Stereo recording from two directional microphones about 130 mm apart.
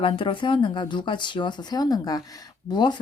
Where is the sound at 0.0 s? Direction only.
40° left (ahead or behind).